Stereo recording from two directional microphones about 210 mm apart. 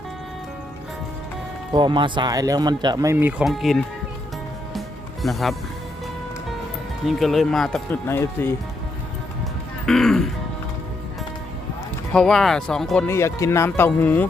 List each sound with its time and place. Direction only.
1.7 s speech: 20° right (ahead or behind); by 3.8 s centre (ahead or behind)
5.2 s speech: centre (ahead or behind)
7.1 s speech: centre (ahead or behind)
9.8 s music: centre (ahead or behind)
12.1 s speech: centre (ahead or behind)